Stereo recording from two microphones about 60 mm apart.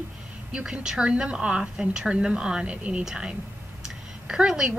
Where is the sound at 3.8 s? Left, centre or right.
Centre.